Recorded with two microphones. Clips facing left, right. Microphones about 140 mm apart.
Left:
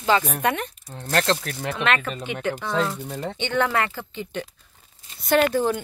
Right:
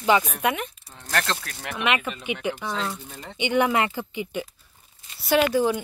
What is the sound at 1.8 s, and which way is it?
Speech, 15° right (ahead or behind).